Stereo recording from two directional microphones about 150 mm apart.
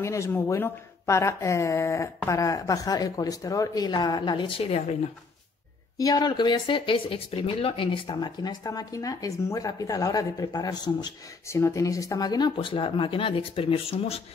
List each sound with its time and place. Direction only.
0.0 s speech: 20° left (ahead or behind); by 4.9 s 45° left (ahead or behind)
5.9 s speech: 25° left (ahead or behind); by 14.2 s 40° left (ahead or behind)